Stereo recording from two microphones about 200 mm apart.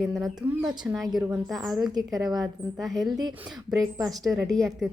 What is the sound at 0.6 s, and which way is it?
Speech, 20° right (ahead or behind).